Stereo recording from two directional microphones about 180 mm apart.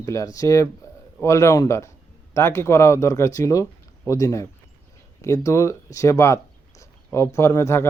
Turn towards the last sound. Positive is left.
turn(degrees=15)  # may be behind; listen again after turning